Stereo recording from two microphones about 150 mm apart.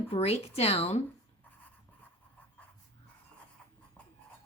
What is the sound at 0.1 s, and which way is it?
Speech, 40° left (ahead or behind).